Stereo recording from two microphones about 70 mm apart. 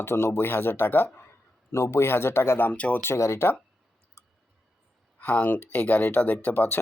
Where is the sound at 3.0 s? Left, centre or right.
Left.